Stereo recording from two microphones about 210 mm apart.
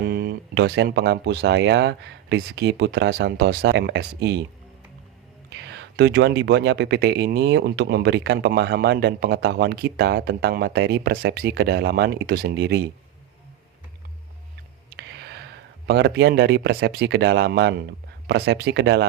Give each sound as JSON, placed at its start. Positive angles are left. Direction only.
{"t": 0.0, "sound": "speech", "side_deg": -45}
{"t": 5.5, "sound": "speech", "side_deg": -55}
{"t": 14.9, "sound": "speech", "side_deg": -55}